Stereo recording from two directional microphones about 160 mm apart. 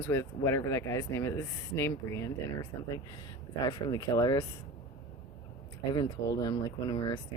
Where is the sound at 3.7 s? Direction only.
25° left (ahead or behind).